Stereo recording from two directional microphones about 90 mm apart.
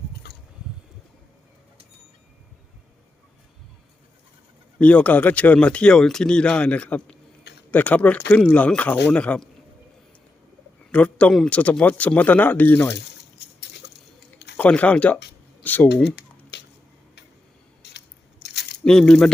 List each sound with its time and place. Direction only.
4.8 s speech: 15° left (ahead or behind)
10.9 s speech: 15° left (ahead or behind)
14.5 s speech: 15° left (ahead or behind)
18.9 s speech: 5° left (ahead or behind)